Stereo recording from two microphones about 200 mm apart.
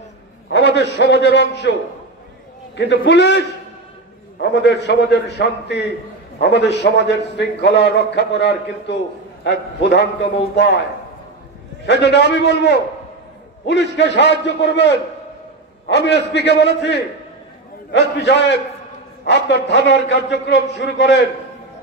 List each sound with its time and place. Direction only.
0.5 s a man's voice: 60° left (ahead or behind)
11.8 s a man's voice: 60° left (ahead or behind)